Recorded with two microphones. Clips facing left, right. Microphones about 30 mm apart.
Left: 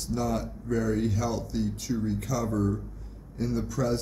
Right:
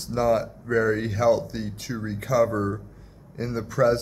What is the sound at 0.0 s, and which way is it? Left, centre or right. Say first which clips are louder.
A man's voice: right 7 dB; right.